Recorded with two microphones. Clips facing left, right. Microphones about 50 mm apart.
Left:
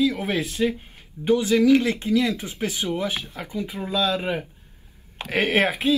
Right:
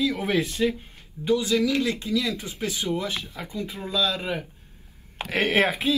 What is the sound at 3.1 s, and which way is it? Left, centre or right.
Speech, centre.